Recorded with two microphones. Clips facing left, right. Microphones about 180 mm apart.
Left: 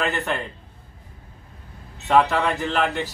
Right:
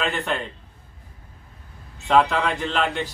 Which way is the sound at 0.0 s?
5° left (ahead or behind).